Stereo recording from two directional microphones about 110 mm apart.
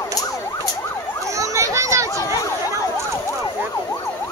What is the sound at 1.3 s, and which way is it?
Emergency vehicle, 30° right (ahead or behind).